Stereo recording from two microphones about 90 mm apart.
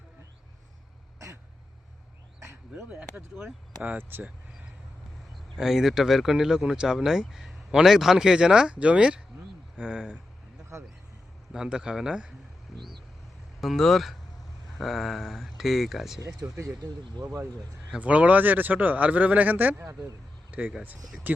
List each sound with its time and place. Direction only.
3.2 s a man's voice: 20° right (ahead or behind)
5.5 s a man's voice: 5° right (ahead or behind)
11.5 s a man's voice: 10° right (ahead or behind)
13.6 s speech: centre (ahead or behind)
16.2 s speech: 35° right (ahead or behind)
17.9 s a man's voice: 15° right (ahead or behind)